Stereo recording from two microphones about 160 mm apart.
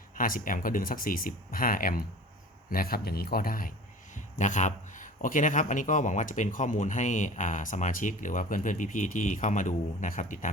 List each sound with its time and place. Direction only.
0.2 s speech: 60° left (ahead or behind)
4.1 s a man's voice: 50° left (ahead or behind)